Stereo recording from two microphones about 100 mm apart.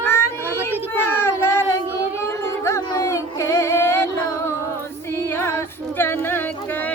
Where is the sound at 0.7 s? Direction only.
20° left (ahead or behind).